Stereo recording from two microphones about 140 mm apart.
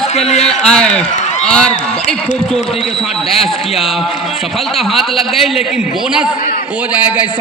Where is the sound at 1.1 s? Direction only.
55° left (ahead or behind).